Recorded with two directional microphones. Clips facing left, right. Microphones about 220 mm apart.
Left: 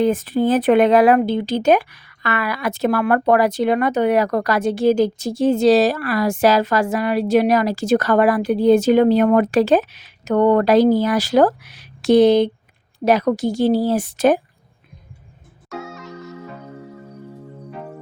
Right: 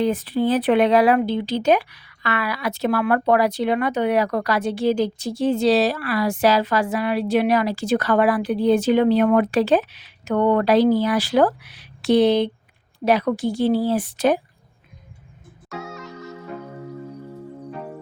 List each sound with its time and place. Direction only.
0.0 s speech: 45° left (ahead or behind)
15.7 s music: centre (ahead or behind)